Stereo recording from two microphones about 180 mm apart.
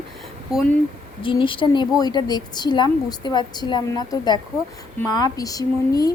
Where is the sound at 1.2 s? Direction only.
30° left (ahead or behind).